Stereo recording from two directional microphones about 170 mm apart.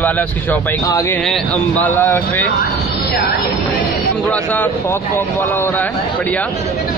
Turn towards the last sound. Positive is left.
turn(degrees=10)  # may be behind; listen again after turning